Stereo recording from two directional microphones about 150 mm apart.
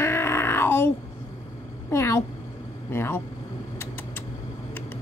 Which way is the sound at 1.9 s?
20° left (ahead or behind).